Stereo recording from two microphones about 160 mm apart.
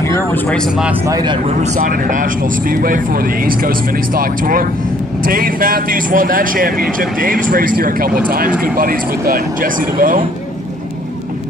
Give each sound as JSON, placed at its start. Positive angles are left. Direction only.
{"t": 0.0, "sound": "a sound", "side_deg": 15}
{"t": 0.5, "sound": "speech", "side_deg": 5}
{"t": 1.0, "sound": "speech", "side_deg": -25}
{"t": 1.6, "sound": "speech", "side_deg": -55}